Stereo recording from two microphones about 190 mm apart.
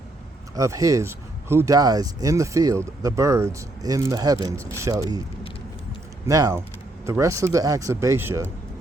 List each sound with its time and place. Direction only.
0.5 s speech: 15° right (ahead or behind)
6.2 s speech: 15° right (ahead or behind)